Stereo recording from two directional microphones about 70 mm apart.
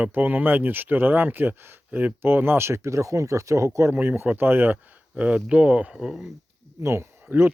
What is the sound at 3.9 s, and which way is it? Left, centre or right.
Speech, right.